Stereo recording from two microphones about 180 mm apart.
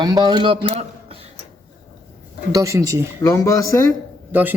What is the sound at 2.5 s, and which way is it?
Speech, 20° right (ahead or behind).